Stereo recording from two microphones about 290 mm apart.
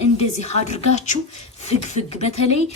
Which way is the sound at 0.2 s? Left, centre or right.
Left.